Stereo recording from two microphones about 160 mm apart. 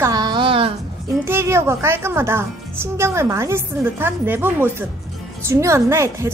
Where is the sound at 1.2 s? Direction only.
15° right (ahead or behind).